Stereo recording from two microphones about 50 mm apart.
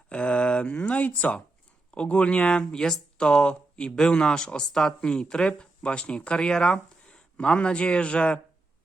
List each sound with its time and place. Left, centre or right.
0.1 s speech: left